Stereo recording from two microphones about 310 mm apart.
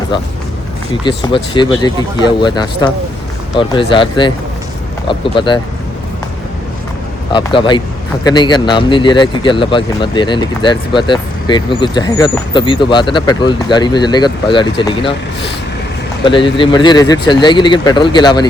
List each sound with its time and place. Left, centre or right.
1.0 s speech: centre
7.3 s speech: centre
16.2 s speech: centre